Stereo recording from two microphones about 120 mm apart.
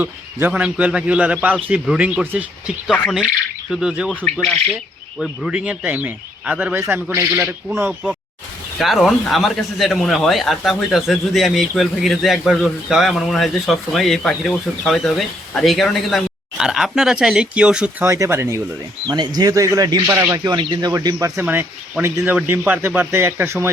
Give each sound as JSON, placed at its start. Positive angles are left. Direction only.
{"t": 0.0, "sound": "speech", "side_deg": -15}
{"t": 4.1, "sound": "speech", "side_deg": 10}
{"t": 5.2, "sound": "speech", "side_deg": -5}
{"t": 8.8, "sound": "speech", "side_deg": 0}
{"t": 18.0, "sound": "speech", "side_deg": -25}
{"t": 19.0, "sound": "speech", "side_deg": -35}
{"t": 20.4, "sound": "speech", "side_deg": -40}
{"t": 21.4, "sound": "speech", "side_deg": -15}